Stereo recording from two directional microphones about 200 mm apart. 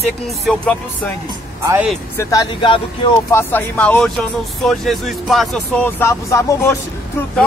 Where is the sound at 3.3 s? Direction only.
10° left (ahead or behind).